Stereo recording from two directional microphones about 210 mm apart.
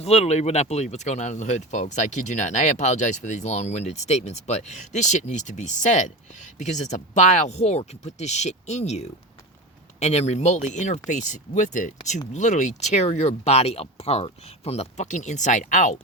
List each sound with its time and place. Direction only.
0.0 s speech: 30° left (ahead or behind)